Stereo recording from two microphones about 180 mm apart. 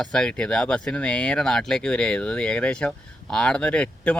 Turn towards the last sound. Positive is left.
turn(degrees=5)  # may be behind; listen again after turning